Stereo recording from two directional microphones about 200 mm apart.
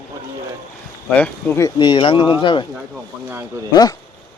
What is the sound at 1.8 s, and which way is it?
Speech, 25° left (ahead or behind).